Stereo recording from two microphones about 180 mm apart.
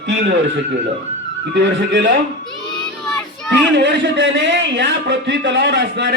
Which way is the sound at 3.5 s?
75° right (ahead or behind).